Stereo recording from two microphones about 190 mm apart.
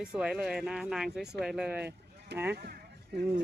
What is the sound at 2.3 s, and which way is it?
Speech, 60° right (ahead or behind).